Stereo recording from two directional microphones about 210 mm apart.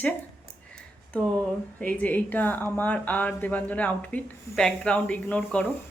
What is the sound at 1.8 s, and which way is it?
Speech, 5° left (ahead or behind).